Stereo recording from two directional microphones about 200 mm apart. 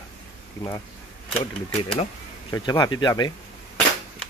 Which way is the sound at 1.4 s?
25° left (ahead or behind).